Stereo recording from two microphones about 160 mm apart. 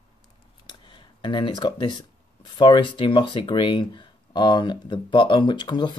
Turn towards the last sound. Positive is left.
turn(degrees=30)  # may be behind; listen again after turning